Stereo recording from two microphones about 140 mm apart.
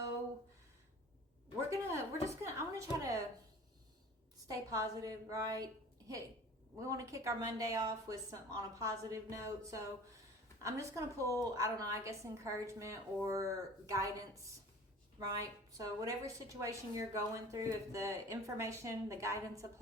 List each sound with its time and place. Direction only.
2.2 s a sound: 20° right (ahead or behind)
4.4 s a woman's voice: 25° right (ahead or behind)
6.7 s a woman's voice: 20° right (ahead or behind)